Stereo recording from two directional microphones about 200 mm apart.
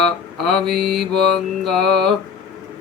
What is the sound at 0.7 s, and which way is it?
Mantra, 50° right (ahead or behind).